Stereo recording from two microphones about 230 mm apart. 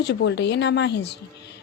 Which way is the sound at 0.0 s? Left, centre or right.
Left.